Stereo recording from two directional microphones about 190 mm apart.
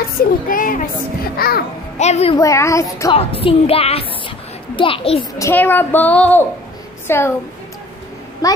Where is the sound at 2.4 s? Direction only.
15° left (ahead or behind).